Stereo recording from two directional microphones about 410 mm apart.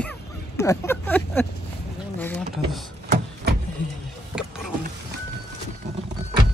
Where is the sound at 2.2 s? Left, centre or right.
Centre.